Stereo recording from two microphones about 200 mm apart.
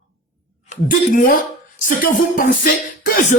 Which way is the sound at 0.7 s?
45° left (ahead or behind).